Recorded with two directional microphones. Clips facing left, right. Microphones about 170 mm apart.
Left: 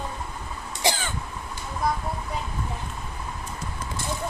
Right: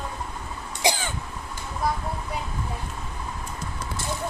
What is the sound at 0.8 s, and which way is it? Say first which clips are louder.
Cough: right 1 dB; 15° right (ahead or behind).